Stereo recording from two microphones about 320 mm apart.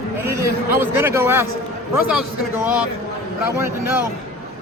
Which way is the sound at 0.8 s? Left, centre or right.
Centre.